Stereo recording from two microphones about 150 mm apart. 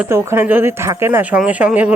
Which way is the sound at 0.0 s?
15° right (ahead or behind).